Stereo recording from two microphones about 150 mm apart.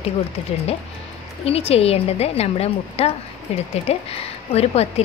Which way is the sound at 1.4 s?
40° left (ahead or behind).